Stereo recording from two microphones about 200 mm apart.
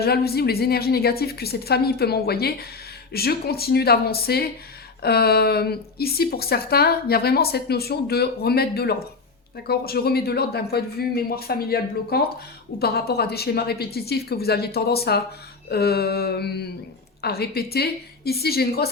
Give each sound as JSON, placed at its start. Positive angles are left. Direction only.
{"t": 0.0, "sound": "a woman's voice", "side_deg": 50}